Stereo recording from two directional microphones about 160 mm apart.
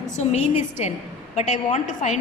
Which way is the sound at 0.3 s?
45° left (ahead or behind).